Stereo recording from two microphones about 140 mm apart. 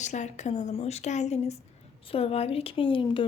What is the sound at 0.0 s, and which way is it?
A woman's voice, 55° left (ahead or behind).